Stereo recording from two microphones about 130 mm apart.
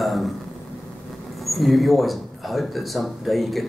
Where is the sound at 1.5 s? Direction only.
Centre (ahead or behind).